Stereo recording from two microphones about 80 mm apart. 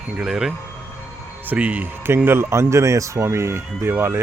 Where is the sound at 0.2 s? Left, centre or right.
Centre.